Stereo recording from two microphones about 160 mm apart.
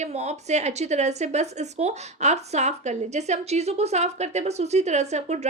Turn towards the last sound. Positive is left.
turn(degrees=-45)  # may be behind; listen again after turning